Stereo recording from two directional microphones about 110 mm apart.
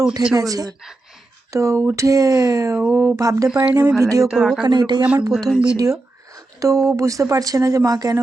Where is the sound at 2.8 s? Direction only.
Centre (ahead or behind).